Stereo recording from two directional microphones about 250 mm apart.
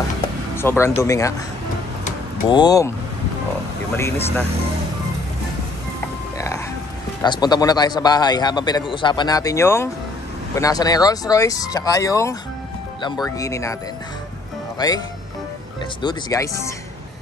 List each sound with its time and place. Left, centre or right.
0.6 s a man's voice: centre
2.4 s a man's voice: centre
3.9 s a man's voice: centre
6.3 s music: centre
7.2 s a man's voice: centre
14.8 s a man's voice: centre
16.0 s a man's voice: centre